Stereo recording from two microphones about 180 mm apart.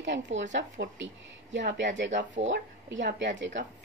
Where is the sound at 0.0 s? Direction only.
80° right.